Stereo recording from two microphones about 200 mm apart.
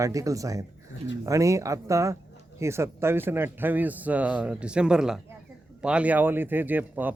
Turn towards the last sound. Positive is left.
turn(degrees=-10)  # may be behind; listen again after turning